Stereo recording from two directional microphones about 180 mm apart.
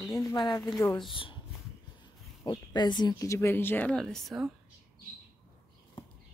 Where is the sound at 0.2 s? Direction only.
20° left (ahead or behind).